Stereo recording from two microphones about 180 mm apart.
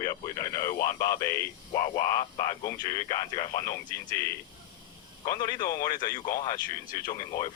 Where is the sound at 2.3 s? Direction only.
35° left (ahead or behind).